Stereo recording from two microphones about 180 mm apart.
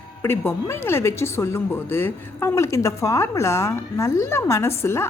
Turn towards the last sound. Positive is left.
turn(degrees=15)  # may be behind; listen again after turning